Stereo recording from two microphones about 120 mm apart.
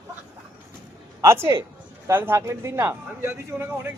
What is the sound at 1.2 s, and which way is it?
A man's voice, 25° right (ahead or behind).